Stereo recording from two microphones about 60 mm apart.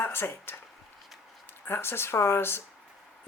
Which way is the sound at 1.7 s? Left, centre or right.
Left.